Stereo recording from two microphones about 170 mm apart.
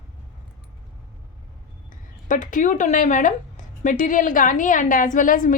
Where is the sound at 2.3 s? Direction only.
50° left (ahead or behind).